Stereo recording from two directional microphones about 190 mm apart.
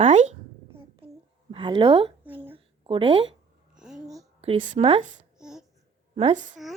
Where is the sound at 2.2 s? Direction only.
10° right (ahead or behind).